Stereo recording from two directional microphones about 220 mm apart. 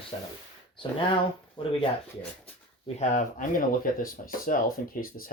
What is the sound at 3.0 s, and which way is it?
Speech, 35° left (ahead or behind).